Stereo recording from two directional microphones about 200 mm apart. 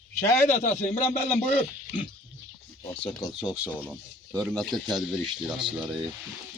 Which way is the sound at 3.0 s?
20° left (ahead or behind).